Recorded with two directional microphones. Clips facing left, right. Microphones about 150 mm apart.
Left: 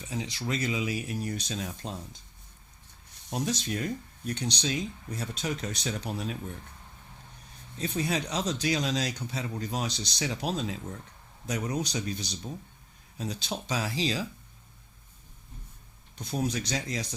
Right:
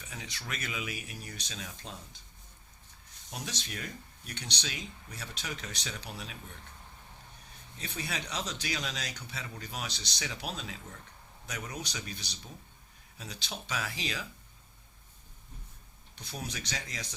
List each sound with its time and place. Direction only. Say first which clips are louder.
0.0 s speech: left 10 dB; 30° left (ahead or behind)
3.2 s speech: left 11 dB; 35° left (ahead or behind)
7.8 s speech: left 9 dB; 35° left (ahead or behind)
16.1 s speech: left 10 dB; 40° left (ahead or behind)